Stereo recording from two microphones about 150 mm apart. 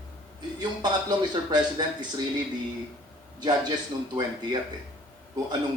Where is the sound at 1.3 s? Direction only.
30° right (ahead or behind).